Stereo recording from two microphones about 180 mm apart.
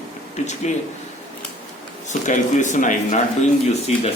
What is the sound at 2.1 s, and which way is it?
Speech, 45° left (ahead or behind).